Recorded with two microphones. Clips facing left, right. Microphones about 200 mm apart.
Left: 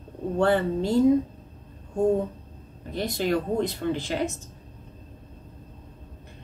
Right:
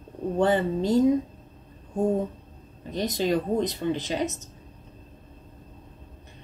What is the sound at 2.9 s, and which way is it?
Speech, 20° right (ahead or behind).